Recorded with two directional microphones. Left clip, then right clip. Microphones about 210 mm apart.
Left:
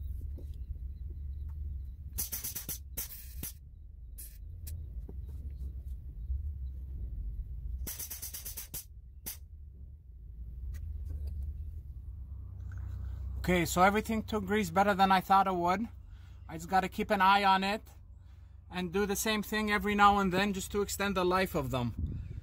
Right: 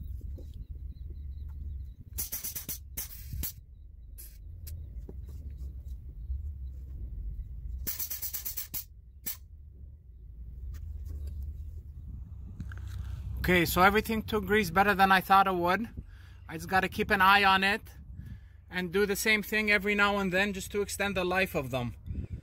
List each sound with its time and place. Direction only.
2.2 s music: 35° right (ahead or behind)
13.4 s speech: 5° right (ahead or behind)